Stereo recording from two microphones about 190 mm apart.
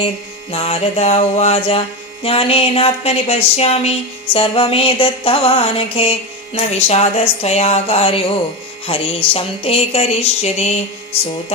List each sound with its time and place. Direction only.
0.5 s speech: 30° left (ahead or behind)